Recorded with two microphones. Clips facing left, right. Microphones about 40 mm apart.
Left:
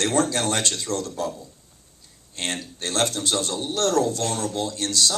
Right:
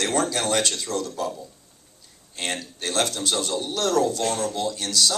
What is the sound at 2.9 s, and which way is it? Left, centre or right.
Speech, left.